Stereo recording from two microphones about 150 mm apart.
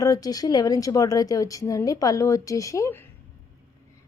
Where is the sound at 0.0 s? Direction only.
25° left (ahead or behind).